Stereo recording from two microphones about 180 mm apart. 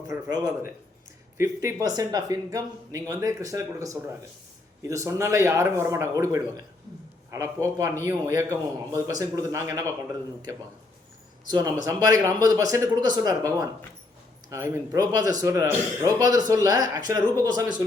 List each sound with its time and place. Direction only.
0.1 s a man's voice: 20° right (ahead or behind)
11.5 s a man's voice: 20° right (ahead or behind)